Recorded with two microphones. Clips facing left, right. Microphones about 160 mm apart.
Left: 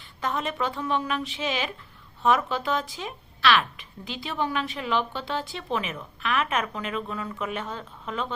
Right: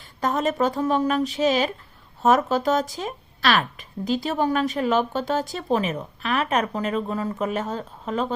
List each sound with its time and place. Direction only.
0.2 s speech: 40° right (ahead or behind)